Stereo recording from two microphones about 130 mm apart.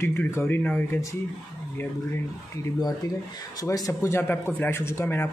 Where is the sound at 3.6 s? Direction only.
30° left (ahead or behind).